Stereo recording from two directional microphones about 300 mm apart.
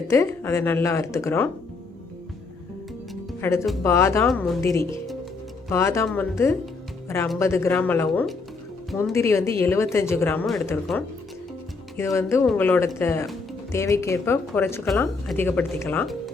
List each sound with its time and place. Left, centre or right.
0.1 s speech: centre
3.4 s speech: centre